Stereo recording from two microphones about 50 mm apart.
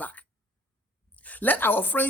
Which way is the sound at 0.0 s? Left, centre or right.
Left.